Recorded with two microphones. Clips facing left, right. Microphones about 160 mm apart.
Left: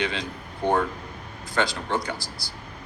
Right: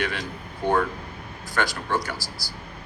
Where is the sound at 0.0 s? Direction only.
20° left (ahead or behind).